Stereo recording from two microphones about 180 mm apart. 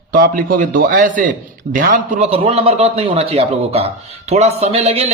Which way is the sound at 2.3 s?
30° right (ahead or behind).